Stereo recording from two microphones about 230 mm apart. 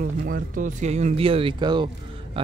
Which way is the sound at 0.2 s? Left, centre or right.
Right.